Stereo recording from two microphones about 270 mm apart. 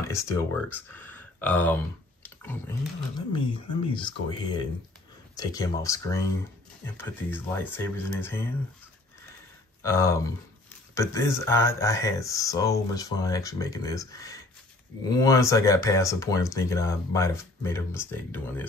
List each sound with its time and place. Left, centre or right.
0.1 s speech: centre
2.2 s a sound: centre
3.2 s speech: centre
9.8 s speech: centre